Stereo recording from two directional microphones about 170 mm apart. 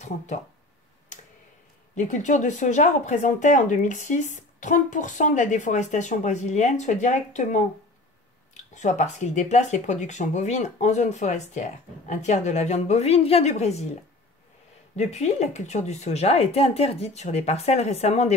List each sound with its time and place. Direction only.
2.0 s speech: 45° left (ahead or behind)
8.7 s a woman's voice: 45° left (ahead or behind)
15.0 s a woman's voice: 40° left (ahead or behind)